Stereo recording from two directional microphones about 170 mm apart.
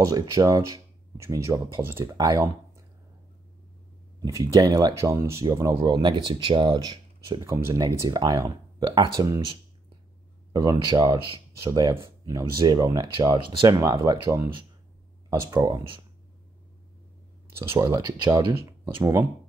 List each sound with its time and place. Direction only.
0.0 s speech: 20° right (ahead or behind)
4.2 s speech: 20° right (ahead or behind)
17.6 s speech: 25° right (ahead or behind)